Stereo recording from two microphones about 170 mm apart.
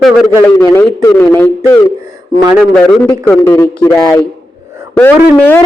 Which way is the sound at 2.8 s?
10° left (ahead or behind).